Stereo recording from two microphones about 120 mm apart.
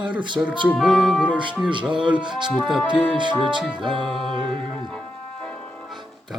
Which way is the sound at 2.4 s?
5° right (ahead or behind).